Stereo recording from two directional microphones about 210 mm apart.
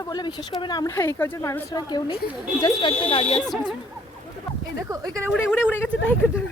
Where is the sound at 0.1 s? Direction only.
20° left (ahead or behind).